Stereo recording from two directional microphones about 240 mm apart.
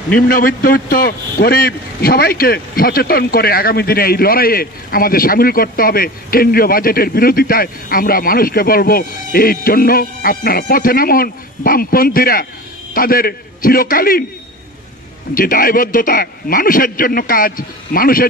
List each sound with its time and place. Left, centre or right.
0.3 s a man's voice: left
15.3 s a man's voice: left